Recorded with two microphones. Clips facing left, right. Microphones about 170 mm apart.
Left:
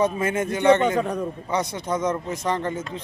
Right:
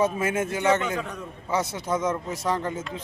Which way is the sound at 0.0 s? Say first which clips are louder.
Left 2 dB; 5° right (ahead or behind).